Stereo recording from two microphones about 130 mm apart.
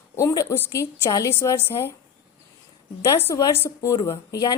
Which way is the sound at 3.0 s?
20° left (ahead or behind).